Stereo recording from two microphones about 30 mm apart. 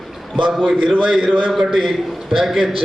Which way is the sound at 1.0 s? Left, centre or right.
Right.